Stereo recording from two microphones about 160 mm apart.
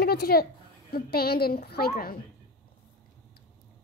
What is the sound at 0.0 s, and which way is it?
A woman's voice, 75° left (ahead or behind).